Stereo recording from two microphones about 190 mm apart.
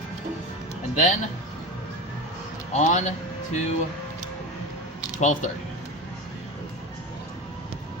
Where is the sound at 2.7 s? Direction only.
40° left (ahead or behind).